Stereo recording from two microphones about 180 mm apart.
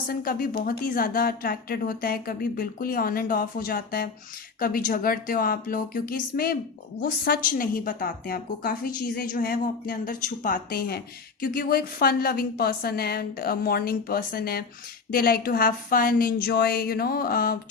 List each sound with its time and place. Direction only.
0.1 s a woman's voice: 55° left (ahead or behind)